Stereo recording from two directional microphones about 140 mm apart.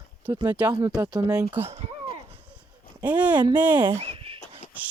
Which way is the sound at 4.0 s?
45° right (ahead or behind).